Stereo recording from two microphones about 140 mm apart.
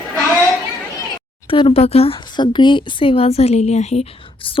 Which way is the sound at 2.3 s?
35° left (ahead or behind).